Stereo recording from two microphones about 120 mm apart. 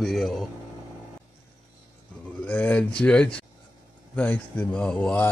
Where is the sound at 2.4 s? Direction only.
10° left (ahead or behind).